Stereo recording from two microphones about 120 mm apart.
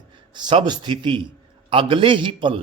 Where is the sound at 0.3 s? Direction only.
40° right (ahead or behind).